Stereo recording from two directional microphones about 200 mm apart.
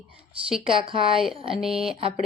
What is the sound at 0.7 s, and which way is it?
Speech, 25° right (ahead or behind).